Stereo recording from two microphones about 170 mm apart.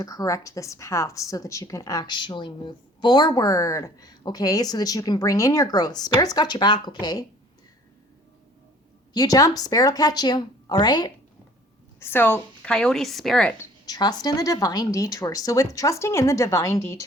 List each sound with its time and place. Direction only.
0.0 s a woman's voice: 20° left (ahead or behind)
9.1 s a woman's voice: 20° left (ahead or behind)
11.9 s a woman's voice: 15° left (ahead or behind)
13.6 s a woman's voice: 25° left (ahead or behind)